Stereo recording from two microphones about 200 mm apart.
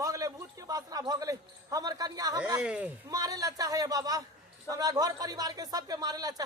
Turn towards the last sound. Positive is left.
turn(degrees=-20)  # may be behind; listen again after turning